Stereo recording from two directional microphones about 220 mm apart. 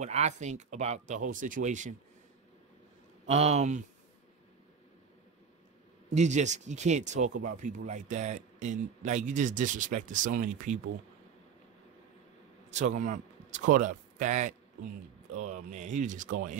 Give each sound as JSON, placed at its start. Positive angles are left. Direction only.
{"t": 0.0, "sound": "speech", "side_deg": -30}
{"t": 3.3, "sound": "speech", "side_deg": -30}
{"t": 6.0, "sound": "speech", "side_deg": -30}
{"t": 12.7, "sound": "a man's voice", "side_deg": -35}